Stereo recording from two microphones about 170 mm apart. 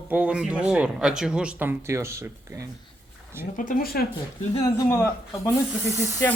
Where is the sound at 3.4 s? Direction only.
55° left (ahead or behind).